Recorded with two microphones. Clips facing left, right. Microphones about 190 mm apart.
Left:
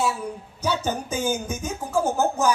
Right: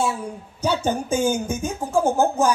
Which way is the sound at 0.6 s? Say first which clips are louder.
Right 4 dB; 30° right (ahead or behind).